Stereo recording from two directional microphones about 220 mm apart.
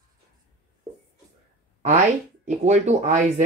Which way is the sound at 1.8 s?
35° right (ahead or behind).